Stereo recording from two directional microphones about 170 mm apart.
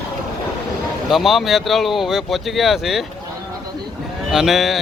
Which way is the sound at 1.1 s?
Centre (ahead or behind).